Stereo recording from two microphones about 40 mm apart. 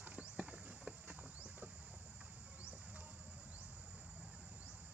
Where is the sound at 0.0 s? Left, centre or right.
Right.